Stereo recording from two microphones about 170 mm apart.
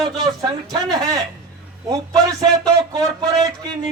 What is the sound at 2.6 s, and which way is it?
Speech, 25° right (ahead or behind).